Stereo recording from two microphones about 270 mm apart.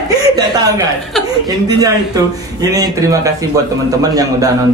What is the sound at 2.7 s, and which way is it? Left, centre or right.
A man's voice, centre.